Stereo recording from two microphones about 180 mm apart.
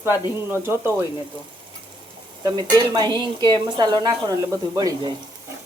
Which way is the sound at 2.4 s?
20° right (ahead or behind).